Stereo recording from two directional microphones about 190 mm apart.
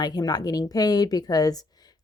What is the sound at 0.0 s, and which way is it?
Speech, 20° left (ahead or behind).